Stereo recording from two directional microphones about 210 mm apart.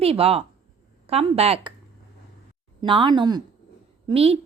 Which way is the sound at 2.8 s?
20° right (ahead or behind).